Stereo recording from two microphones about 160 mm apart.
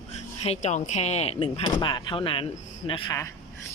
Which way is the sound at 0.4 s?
45° left (ahead or behind).